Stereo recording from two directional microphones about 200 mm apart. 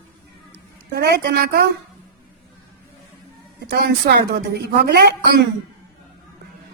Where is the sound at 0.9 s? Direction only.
55° right (ahead or behind).